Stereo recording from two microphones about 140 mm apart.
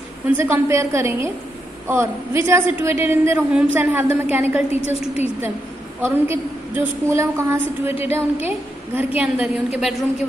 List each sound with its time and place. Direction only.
0.3 s a woman's voice: 15° right (ahead or behind)
7.9 s a woman's voice: 45° left (ahead or behind)
8.5 s a woman's voice: 10° right (ahead or behind)